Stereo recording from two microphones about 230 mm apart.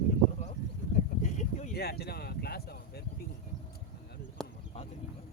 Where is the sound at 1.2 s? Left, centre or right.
Left.